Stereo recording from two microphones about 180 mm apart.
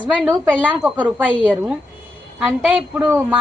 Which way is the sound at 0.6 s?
10° right (ahead or behind).